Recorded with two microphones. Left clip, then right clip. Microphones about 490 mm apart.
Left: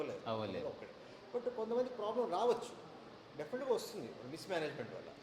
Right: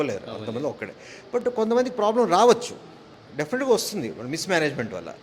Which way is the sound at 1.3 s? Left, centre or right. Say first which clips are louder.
Right 16 dB; right.